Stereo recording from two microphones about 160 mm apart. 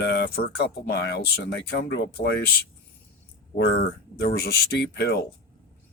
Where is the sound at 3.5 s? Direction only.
90° left.